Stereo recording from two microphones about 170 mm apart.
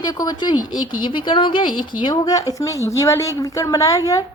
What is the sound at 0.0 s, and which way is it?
A woman's voice, 20° left (ahead or behind).